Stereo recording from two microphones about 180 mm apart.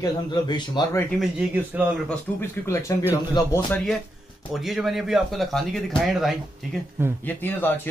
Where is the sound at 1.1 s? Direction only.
5° right (ahead or behind).